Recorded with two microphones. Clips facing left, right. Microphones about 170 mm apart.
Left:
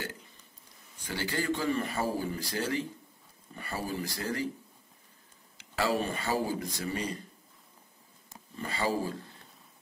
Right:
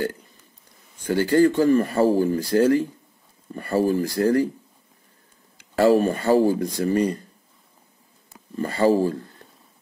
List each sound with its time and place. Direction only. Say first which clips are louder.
1.0 s speech: right 15 dB; 50° right (ahead or behind)
5.6 s speech: right 13 dB; 45° right (ahead or behind)
8.5 s speech: right 12 dB; 50° right (ahead or behind)